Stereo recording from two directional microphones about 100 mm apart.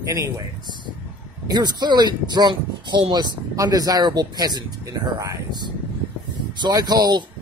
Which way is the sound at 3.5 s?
35° right (ahead or behind).